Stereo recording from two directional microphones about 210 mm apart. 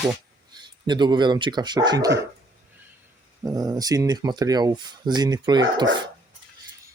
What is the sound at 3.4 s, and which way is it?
Speech, 15° right (ahead or behind).